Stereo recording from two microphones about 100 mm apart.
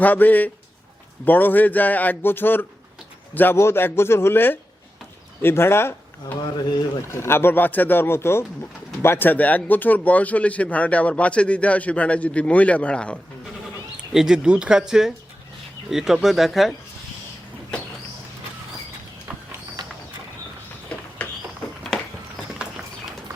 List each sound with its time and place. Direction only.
0.0 s speech: 15° left (ahead or behind)
13.9 s speech: 5° right (ahead or behind)
21.2 s a sound: 15° left (ahead or behind)